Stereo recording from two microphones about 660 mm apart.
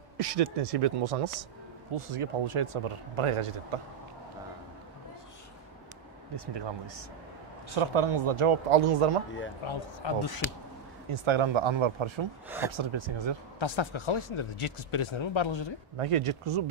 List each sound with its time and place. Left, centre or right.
0.2 s speech: right
6.3 s speech: right
9.7 s speech: left
11.1 s speech: right
12.4 s speech: centre
12.7 s speech: right
13.6 s speech: left
16.0 s speech: right